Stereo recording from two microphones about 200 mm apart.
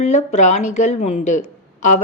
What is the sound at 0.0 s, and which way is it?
Speech, 35° left (ahead or behind).